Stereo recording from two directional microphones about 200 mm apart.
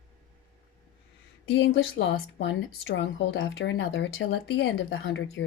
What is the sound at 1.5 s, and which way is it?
A woman's voice, 75° left (ahead or behind).